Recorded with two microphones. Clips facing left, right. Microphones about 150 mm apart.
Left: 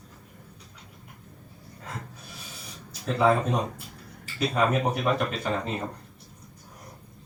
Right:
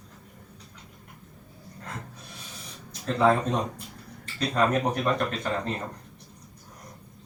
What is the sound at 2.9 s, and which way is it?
Speech, 5° left (ahead or behind).